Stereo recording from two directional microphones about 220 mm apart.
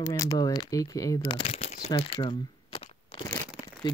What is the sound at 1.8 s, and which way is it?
Crunch, 25° left (ahead or behind).